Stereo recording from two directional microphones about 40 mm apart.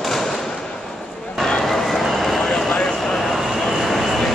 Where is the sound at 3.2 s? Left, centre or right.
Centre.